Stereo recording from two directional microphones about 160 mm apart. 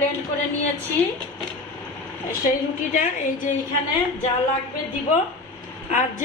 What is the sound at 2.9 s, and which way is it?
Speech, 55° left (ahead or behind).